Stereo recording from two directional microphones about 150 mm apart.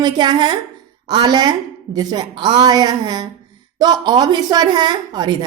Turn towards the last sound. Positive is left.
turn(degrees=-30)  # may be behind; listen again after turning